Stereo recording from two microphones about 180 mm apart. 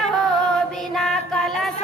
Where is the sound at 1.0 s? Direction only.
Centre (ahead or behind).